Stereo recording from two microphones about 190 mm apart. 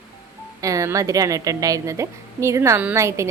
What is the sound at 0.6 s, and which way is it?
A woman's voice, 15° right (ahead or behind).